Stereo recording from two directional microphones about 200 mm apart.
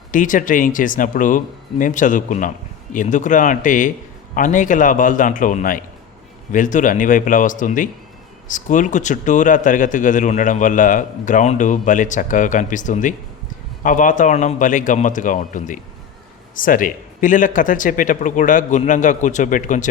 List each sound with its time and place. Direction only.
0.1 s a man's voice: 40° left (ahead or behind)